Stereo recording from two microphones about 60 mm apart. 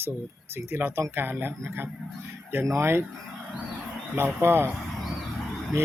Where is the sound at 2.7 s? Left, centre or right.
Right.